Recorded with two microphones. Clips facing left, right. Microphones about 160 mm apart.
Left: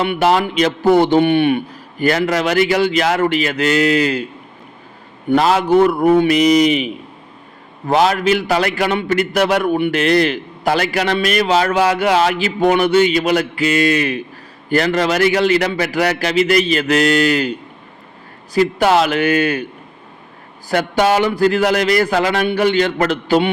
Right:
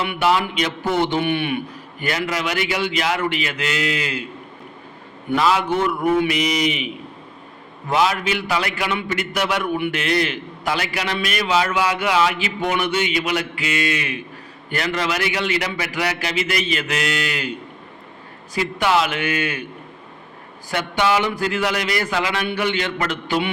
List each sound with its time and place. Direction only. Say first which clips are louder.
0.0 s a man's voice: left 5 dB; 35° left (ahead or behind)
5.3 s a man's voice: left 6 dB; 45° left (ahead or behind)
18.5 s a man's voice: left 6 dB; 40° left (ahead or behind)
20.7 s a man's voice: left 5 dB; 40° left (ahead or behind)